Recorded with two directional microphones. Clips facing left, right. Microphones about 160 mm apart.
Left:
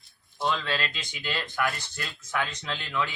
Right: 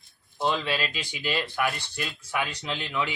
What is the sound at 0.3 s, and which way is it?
Speech, 25° right (ahead or behind).